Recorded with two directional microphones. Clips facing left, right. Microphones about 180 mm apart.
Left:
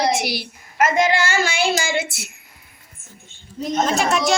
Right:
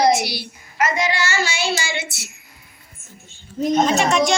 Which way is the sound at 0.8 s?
50° left (ahead or behind).